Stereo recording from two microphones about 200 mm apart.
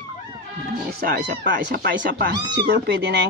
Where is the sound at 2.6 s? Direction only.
55° right (ahead or behind).